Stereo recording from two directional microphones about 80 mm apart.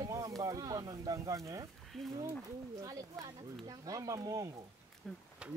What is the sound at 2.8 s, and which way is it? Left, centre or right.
Speech, right.